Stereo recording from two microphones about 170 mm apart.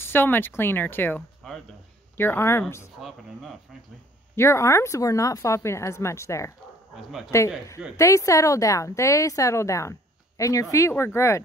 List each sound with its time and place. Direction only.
0.0 s a woman's voice: 10° left (ahead or behind)
3.0 s speech: centre (ahead or behind)
4.4 s a woman's voice: 15° left (ahead or behind)
7.0 s speech: centre (ahead or behind)
7.2 s a woman's voice: 15° left (ahead or behind)